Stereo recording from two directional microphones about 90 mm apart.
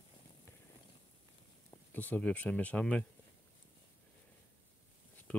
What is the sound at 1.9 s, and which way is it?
Speech, 15° left (ahead or behind).